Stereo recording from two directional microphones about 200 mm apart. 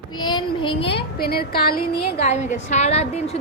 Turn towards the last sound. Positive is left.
turn(degrees=30)  # may be behind; listen again after turning